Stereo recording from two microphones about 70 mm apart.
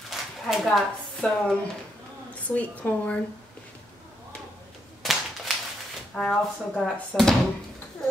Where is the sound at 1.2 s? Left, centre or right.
Centre.